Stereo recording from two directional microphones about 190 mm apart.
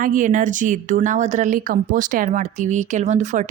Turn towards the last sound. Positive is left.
turn(degrees=-40)  # may be behind; listen again after turning